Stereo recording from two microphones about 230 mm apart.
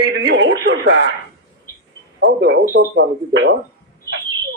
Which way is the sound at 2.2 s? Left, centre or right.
Right.